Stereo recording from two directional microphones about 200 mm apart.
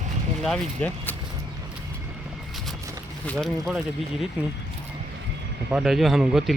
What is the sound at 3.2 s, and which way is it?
Speech, 5° left (ahead or behind).